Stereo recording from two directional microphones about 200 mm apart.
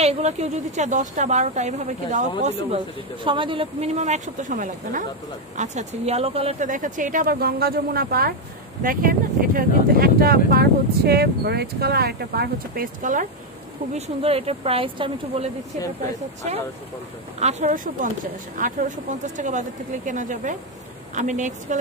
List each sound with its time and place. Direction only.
0.0 s a woman's voice: 30° right (ahead or behind)
3.3 s a woman's voice: 25° right (ahead or behind); by 13.3 s 40° right (ahead or behind)
13.9 s speech: 30° right (ahead or behind)
17.4 s a woman's voice: 35° right (ahead or behind)